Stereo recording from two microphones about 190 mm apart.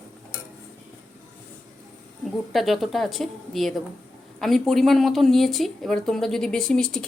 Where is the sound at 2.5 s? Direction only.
Centre (ahead or behind).